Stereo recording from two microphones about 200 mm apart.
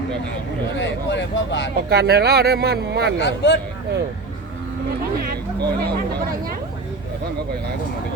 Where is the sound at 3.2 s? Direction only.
65° left (ahead or behind).